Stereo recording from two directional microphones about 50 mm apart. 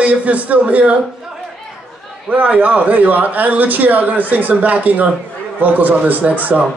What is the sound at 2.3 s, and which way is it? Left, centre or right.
A man's voice, right.